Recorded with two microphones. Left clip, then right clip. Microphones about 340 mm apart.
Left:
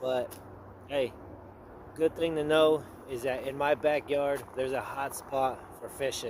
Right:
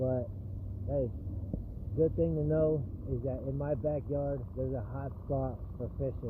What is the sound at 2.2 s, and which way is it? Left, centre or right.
Speech, left.